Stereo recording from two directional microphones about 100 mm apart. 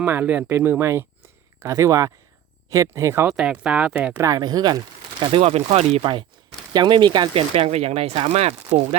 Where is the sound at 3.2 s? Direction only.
10° right (ahead or behind).